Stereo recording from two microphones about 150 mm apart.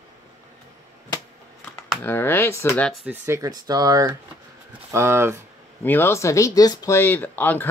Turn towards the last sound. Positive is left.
turn(degrees=10)  # may be behind; listen again after turning